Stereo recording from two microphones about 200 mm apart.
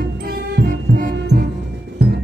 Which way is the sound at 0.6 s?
45° right (ahead or behind).